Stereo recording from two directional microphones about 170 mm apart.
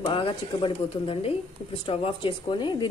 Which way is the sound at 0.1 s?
30° left (ahead or behind).